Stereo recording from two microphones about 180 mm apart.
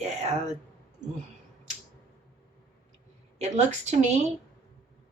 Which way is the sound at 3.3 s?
40° right (ahead or behind).